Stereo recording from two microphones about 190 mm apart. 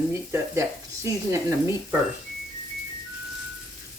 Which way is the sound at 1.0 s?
15° right (ahead or behind).